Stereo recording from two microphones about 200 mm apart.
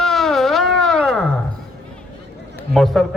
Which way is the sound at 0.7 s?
Centre (ahead or behind).